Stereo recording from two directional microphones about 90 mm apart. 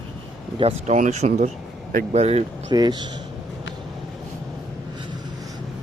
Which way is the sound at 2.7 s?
50° right (ahead or behind).